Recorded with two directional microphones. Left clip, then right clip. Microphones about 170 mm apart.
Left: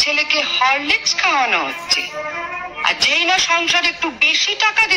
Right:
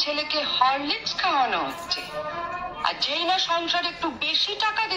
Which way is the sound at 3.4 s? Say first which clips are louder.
Left 9 dB; 50° left (ahead or behind).